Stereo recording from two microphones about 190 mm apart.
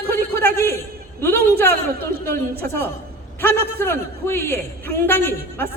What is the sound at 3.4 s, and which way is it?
A man's voice, 15° left (ahead or behind).